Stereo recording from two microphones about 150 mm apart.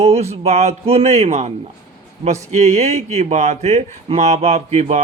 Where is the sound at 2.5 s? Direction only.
50° right (ahead or behind).